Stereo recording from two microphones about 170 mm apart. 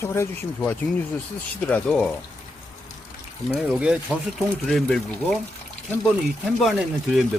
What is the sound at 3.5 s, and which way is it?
Speech, 5° right (ahead or behind).